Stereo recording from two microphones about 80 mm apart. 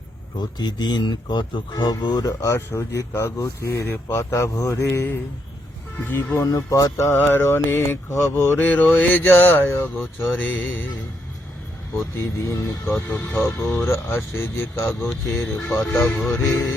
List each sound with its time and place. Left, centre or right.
0.3 s speech: left
2.2 s speech: left
3.8 s mantra: left
4.2 s speech: left
4.9 s mantra: left
6.4 s speech: left
7.2 s mantra: left
10.3 s mantra: centre
12.5 s speech: left
13.3 s mantra: left
13.8 s speech: left